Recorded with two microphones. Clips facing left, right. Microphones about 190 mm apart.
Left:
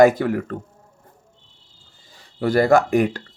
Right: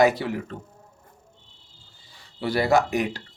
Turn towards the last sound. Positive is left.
turn(degrees=50)  # may be behind; listen again after turning